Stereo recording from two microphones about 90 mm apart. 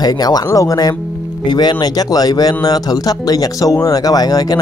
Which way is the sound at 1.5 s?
55° left (ahead or behind).